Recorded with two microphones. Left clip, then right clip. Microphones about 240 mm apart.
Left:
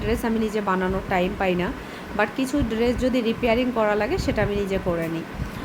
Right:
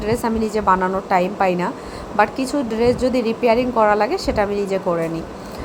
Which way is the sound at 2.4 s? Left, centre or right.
Centre.